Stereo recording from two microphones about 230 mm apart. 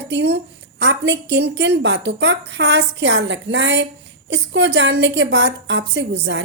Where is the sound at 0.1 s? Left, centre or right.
Right.